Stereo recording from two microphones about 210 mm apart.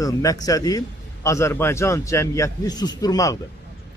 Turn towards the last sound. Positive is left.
turn(degrees=15)  # may be behind; listen again after turning